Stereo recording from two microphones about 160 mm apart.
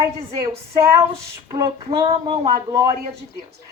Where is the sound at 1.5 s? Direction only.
20° right (ahead or behind).